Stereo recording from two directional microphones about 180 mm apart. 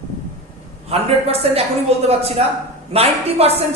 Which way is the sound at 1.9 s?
35° right (ahead or behind).